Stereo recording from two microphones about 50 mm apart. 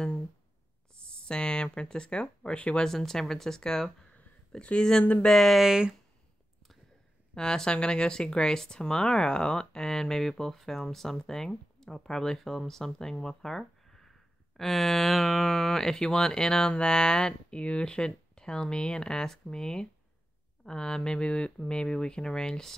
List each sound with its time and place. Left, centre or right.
1.1 s speech: centre
2.9 s speech: centre
5.6 s speech: centre
7.3 s speech: centre